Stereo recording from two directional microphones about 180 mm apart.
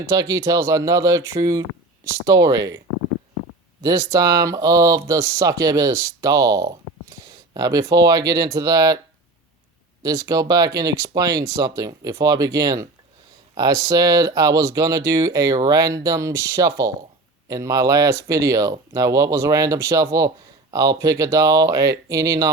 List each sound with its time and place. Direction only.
0.0 s speech: 15° right (ahead or behind)
3.8 s speech: 20° right (ahead or behind)
10.0 s speech: 15° right (ahead or behind)